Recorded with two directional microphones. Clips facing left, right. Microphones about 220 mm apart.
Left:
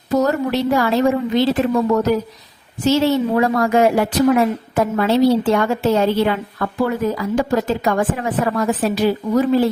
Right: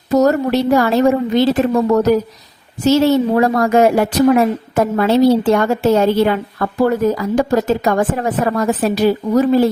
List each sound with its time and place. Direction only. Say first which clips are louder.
0.2 s a woman's voice: right 5 dB; 40° right (ahead or behind)